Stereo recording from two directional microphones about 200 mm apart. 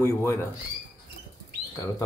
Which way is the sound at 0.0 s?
10° left (ahead or behind).